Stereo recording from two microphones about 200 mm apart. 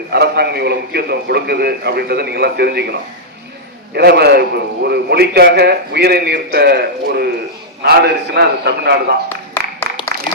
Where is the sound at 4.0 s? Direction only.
55° right (ahead or behind).